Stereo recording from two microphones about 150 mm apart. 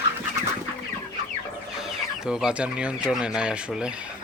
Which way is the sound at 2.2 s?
5° right (ahead or behind).